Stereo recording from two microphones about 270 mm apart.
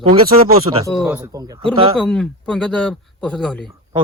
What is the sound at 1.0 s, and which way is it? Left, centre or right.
Speech, centre.